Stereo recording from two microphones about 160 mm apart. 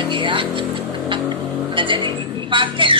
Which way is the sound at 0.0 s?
30° right (ahead or behind).